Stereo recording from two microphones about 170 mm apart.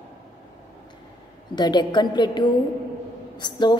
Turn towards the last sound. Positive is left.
turn(degrees=25)  # may be behind; listen again after turning